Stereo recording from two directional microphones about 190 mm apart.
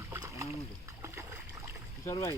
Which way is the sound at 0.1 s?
15° right (ahead or behind).